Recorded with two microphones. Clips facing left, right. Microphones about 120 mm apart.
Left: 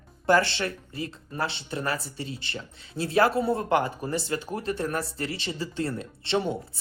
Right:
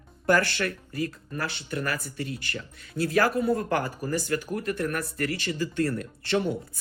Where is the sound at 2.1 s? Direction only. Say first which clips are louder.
Right 2 dB; 55° right (ahead or behind).